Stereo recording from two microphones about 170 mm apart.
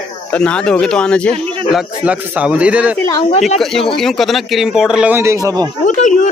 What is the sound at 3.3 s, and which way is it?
Speech, 45° left (ahead or behind).